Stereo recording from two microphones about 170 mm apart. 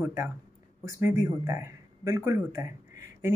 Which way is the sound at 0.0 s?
15° right (ahead or behind).